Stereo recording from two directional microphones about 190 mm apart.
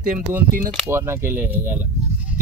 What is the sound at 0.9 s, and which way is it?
Speech, 15° right (ahead or behind).